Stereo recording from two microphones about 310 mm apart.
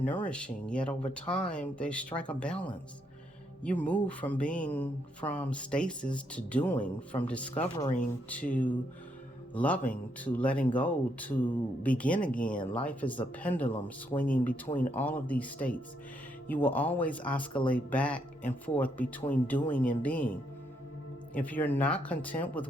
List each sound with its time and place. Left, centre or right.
0.0 s speech: centre
3.6 s speech: centre
7.6 s speech: left
9.6 s speech: centre
21.3 s speech: centre